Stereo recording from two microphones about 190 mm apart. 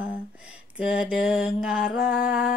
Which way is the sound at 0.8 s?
5° right (ahead or behind).